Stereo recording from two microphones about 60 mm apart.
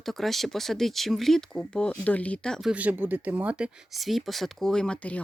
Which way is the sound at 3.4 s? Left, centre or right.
Centre.